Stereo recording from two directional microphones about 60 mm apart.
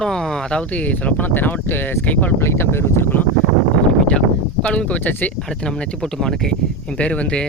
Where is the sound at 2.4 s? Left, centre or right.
Left.